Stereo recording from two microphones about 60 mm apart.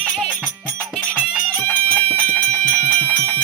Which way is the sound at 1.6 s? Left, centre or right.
Left.